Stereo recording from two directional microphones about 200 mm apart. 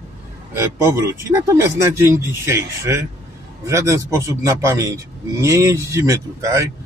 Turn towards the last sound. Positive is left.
turn(degrees=-15)  # may be behind; listen again after turning